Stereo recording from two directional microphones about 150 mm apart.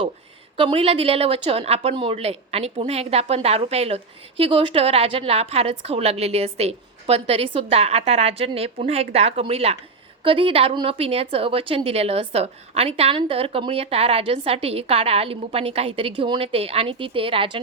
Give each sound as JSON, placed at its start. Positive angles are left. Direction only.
{"t": 0.5, "sound": "a woman's voice", "side_deg": -35}